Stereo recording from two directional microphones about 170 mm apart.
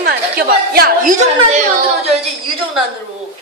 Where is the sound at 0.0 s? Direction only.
65° right (ahead or behind).